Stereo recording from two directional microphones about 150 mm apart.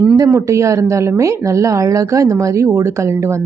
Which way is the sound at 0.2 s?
20° right (ahead or behind).